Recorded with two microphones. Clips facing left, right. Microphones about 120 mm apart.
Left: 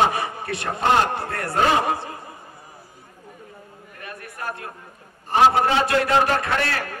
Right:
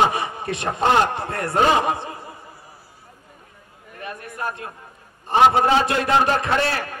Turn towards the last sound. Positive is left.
turn(degrees=-25)  # may be behind; listen again after turning